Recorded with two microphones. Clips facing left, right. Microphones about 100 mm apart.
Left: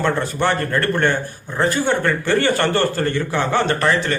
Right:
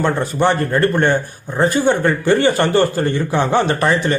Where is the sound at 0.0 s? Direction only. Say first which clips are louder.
Right 3 dB; 15° right (ahead or behind).